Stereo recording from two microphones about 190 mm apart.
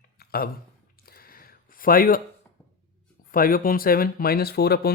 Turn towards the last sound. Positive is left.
turn(degrees=55)  # may be behind; listen again after turning